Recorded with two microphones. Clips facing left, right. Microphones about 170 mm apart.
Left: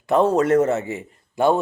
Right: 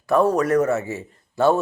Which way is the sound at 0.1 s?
25° left (ahead or behind).